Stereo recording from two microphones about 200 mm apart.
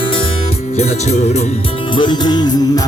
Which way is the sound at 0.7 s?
35° left (ahead or behind).